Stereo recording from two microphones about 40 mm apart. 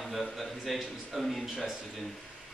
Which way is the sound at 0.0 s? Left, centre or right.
Centre.